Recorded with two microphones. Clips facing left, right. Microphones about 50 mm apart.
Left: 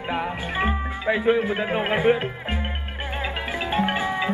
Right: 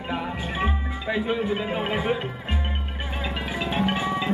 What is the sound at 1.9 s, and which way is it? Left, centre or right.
Speech, left.